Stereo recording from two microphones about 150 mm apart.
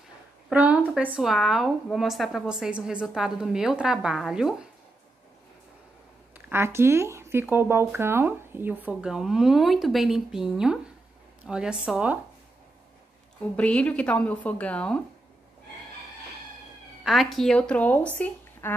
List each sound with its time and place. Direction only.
0.5 s speech: 10° right (ahead or behind)
6.3 s speech: 15° right (ahead or behind)
13.6 s a woman's voice: 10° left (ahead or behind)
17.0 s speech: centre (ahead or behind)